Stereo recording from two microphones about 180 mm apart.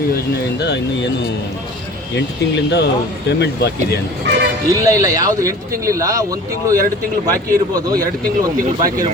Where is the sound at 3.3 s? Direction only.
70° left (ahead or behind).